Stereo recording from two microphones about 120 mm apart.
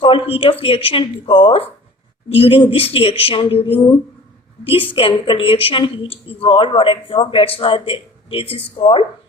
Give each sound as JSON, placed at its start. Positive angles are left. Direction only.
{"t": 0.0, "sound": "speech", "side_deg": 45}